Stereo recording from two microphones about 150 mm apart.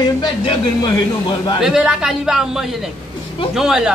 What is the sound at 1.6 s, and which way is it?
A man's voice, 5° right (ahead or behind).